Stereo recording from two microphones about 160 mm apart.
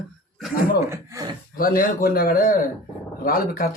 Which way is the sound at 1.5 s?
65° left (ahead or behind).